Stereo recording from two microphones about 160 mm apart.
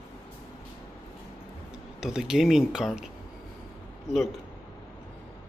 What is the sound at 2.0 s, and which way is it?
Speech, 5° right (ahead or behind).